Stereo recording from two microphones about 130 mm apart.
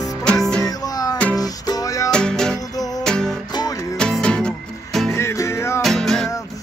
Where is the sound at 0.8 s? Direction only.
30° left (ahead or behind).